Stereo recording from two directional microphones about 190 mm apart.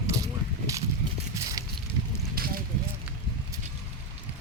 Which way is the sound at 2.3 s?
50° right (ahead or behind).